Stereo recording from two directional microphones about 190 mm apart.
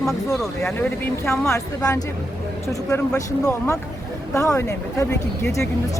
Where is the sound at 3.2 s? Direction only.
15° left (ahead or behind).